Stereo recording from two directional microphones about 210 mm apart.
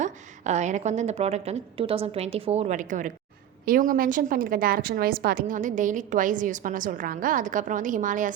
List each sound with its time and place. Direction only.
0.0 s a woman's voice: 35° right (ahead or behind)